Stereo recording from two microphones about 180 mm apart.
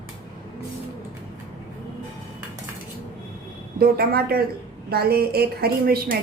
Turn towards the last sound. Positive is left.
turn(degrees=-55)  # may be behind; listen again after turning